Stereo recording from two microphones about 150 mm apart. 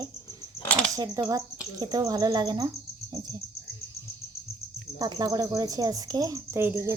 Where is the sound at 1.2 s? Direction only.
25° right (ahead or behind).